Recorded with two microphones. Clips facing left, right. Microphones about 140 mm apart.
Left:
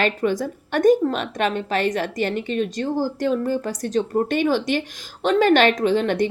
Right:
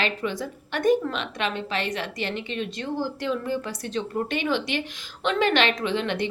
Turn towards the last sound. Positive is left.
turn(degrees=45)  # may be behind; listen again after turning